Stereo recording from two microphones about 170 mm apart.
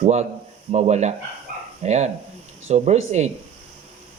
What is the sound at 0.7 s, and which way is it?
A man's voice, 40° right (ahead or behind).